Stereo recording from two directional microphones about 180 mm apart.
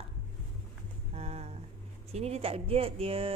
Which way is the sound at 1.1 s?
35° right (ahead or behind).